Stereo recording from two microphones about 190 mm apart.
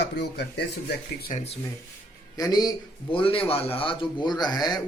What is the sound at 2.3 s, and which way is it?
Speech, 20° left (ahead or behind).